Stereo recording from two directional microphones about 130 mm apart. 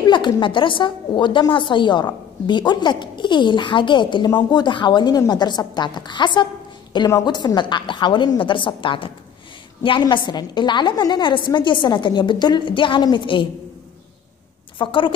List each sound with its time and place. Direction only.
0.0 s a woman's voice: 35° left (ahead or behind)
14.8 s a woman's voice: 40° left (ahead or behind)